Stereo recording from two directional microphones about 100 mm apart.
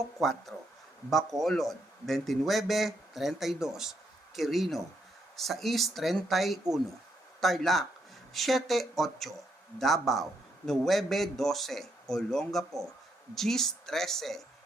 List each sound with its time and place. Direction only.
0.2 s speech: centre (ahead or behind)